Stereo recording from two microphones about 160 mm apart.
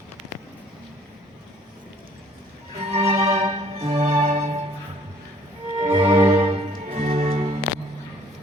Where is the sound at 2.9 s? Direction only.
40° right (ahead or behind).